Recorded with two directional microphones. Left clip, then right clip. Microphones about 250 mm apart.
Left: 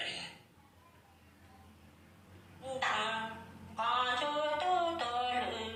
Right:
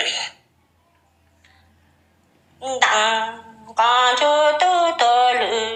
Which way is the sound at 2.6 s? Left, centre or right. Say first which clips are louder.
Right 17 dB; right.